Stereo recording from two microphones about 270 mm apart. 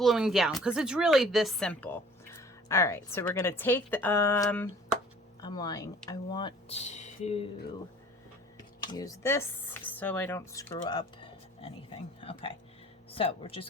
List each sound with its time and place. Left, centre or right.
0.0 s speech: centre; by 7.4 s left
8.5 s a sound: centre
9.9 s speech: centre